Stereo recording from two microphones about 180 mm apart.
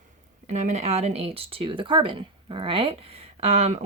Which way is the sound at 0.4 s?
40° right (ahead or behind).